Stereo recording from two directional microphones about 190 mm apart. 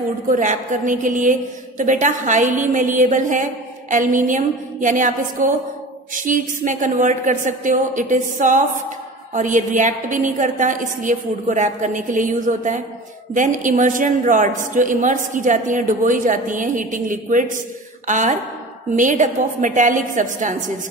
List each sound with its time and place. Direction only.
0.3 s a woman's voice: 40° right (ahead or behind)